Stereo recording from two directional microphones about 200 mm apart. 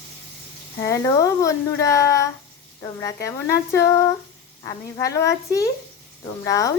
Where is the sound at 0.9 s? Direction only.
15° left (ahead or behind).